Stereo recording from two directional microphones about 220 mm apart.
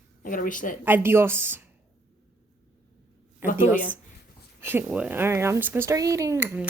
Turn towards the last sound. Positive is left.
turn(degrees=-10)  # may be behind; listen again after turning